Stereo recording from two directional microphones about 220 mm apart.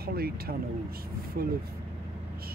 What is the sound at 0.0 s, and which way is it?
Speech, 45° right (ahead or behind).